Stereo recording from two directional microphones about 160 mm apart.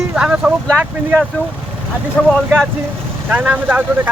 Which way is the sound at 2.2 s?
5° left (ahead or behind).